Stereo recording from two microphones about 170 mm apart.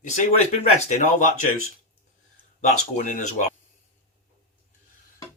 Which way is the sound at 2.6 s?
45° left (ahead or behind).